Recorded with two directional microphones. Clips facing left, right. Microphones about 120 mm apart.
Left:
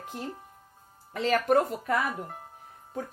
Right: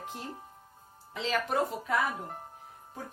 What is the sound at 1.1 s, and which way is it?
Speech, 50° left (ahead or behind).